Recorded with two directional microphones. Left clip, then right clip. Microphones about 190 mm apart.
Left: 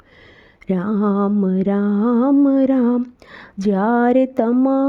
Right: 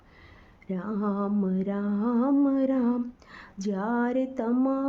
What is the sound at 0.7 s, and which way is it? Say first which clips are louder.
Music: left 11 dB; 40° left (ahead or behind).